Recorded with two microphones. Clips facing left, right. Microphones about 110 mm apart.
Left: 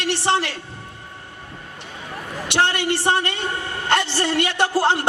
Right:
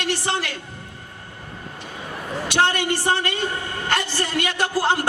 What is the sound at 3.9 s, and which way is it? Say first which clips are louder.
A man's voice: left 4 dB; 25° left (ahead or behind).